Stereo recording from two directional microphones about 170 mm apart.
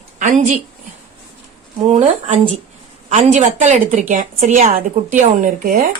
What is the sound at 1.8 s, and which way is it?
A woman's voice, 40° right (ahead or behind).